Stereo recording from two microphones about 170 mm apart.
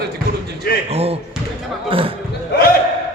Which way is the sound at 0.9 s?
35° right (ahead or behind).